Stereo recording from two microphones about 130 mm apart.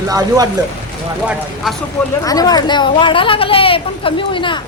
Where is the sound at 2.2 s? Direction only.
30° left (ahead or behind).